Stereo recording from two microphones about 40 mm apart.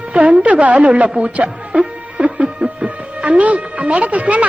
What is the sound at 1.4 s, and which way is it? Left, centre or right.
Music, right.